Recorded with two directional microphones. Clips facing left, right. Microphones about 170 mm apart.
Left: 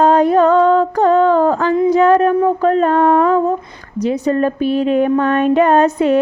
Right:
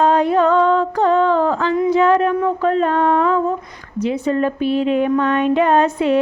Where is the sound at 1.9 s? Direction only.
45° left (ahead or behind).